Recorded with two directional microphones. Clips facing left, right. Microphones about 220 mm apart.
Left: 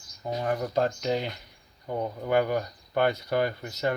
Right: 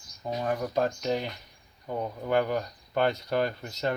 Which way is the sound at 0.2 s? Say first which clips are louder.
Left 1 dB; 20° left (ahead or behind).